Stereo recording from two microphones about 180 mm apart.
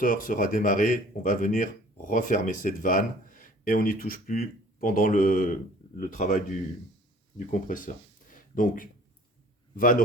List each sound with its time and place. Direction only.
0.0 s speech: 50° left (ahead or behind)